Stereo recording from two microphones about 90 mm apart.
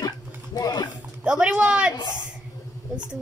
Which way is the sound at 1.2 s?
10° right (ahead or behind).